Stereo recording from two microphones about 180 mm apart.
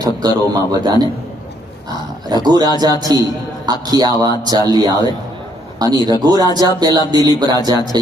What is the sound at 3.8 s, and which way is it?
A man's voice, 20° right (ahead or behind).